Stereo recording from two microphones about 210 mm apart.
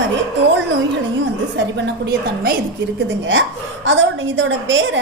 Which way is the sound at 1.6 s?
55° right (ahead or behind).